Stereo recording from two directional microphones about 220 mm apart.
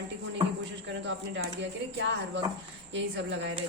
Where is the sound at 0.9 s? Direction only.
55° right (ahead or behind).